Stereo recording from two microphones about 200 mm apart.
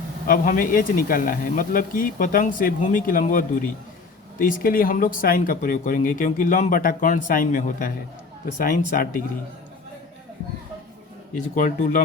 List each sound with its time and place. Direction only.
0.3 s speech: 45° left (ahead or behind)
11.3 s speech: 40° left (ahead or behind)